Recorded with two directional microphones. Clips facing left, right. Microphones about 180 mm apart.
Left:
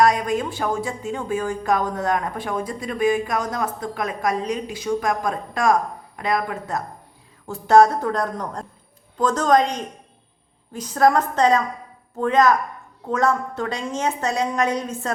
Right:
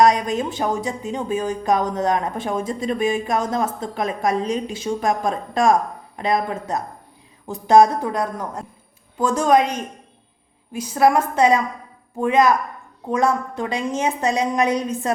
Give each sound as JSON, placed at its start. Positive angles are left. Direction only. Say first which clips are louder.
{"t": 0.0, "sound": "a woman's voice", "louder": "right 2 dB", "side_deg": -20}